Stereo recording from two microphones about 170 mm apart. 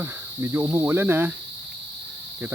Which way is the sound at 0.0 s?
15° right (ahead or behind).